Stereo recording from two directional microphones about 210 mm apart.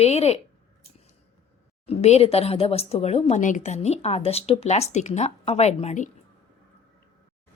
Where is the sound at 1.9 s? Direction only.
30° left (ahead or behind).